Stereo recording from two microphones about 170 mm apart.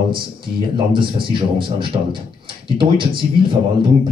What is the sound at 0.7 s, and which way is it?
Speech, 30° right (ahead or behind).